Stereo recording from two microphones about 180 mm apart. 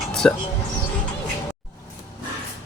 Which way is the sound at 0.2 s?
5° left (ahead or behind).